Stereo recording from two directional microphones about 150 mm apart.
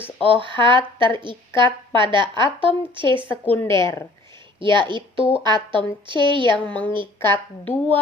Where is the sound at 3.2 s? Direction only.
10° left (ahead or behind).